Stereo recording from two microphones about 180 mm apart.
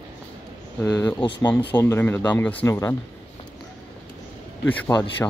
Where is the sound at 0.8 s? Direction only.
10° left (ahead or behind).